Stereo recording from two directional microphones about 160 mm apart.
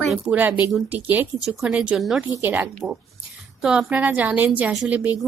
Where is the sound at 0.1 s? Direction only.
10° right (ahead or behind).